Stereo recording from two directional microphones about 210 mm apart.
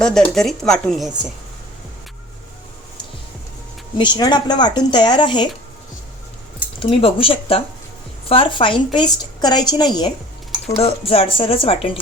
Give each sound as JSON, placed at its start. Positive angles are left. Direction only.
{"t": 0.0, "sound": "speech", "side_deg": 5}
{"t": 3.9, "sound": "a woman's voice", "side_deg": 20}
{"t": 6.7, "sound": "a woman's voice", "side_deg": 25}